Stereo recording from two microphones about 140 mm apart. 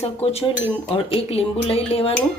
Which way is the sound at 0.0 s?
45° left (ahead or behind).